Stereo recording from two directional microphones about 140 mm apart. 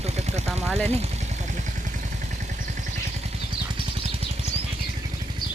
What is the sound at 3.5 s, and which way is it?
Vehicle, 40° right (ahead or behind).